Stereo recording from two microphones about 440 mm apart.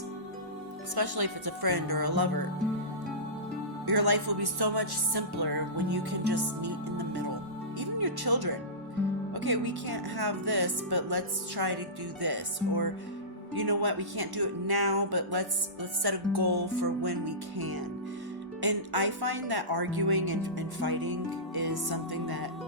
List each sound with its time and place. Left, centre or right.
0.9 s speech: right
3.8 s speech: right